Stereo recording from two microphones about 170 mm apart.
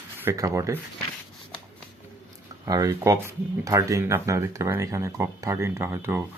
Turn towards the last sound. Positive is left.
turn(degrees=-10)  # may be behind; listen again after turning